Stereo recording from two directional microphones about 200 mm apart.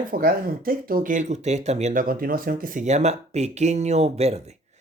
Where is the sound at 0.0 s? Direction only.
45° right (ahead or behind).